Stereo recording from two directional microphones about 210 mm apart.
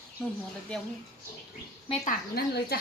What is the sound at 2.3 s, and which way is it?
Speech, 50° left (ahead or behind).